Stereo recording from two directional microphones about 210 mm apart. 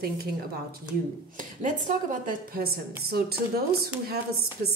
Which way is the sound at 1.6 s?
40° right (ahead or behind).